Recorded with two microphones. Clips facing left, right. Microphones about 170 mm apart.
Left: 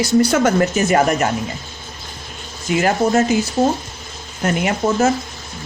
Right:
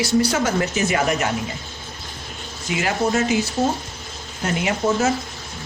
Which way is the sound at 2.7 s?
45° left (ahead or behind).